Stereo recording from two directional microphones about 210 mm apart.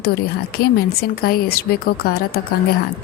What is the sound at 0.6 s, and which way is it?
A woman's voice, 45° left (ahead or behind).